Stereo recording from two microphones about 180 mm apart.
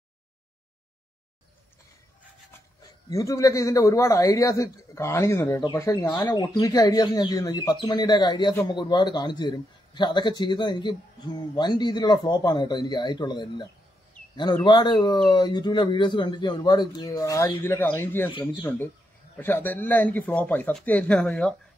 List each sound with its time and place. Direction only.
3.1 s a man's voice: 20° left (ahead or behind)